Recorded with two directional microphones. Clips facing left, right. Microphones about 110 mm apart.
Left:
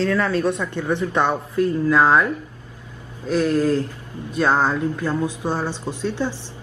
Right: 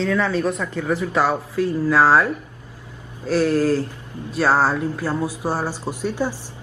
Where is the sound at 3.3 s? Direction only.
30° right (ahead or behind).